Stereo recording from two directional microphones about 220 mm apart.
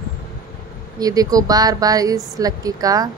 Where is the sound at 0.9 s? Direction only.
15° right (ahead or behind).